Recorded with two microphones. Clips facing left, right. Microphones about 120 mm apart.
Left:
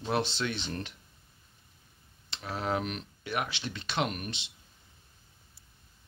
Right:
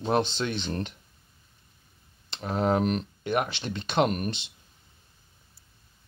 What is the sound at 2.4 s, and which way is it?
Speech, 40° right (ahead or behind).